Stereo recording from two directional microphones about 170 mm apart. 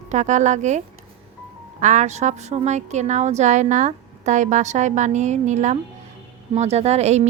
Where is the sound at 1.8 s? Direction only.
45° right (ahead or behind).